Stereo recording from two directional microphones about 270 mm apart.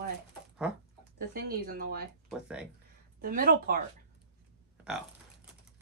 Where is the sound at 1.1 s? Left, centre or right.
Right.